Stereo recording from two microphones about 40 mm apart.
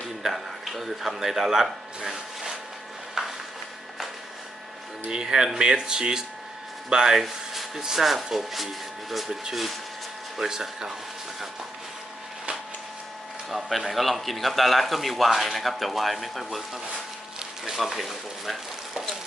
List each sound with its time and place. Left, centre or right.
0.2 s a man's voice: centre
3.2 s a sound: centre
5.0 s speech: centre
7.2 s speech: centre
13.5 s speech: centre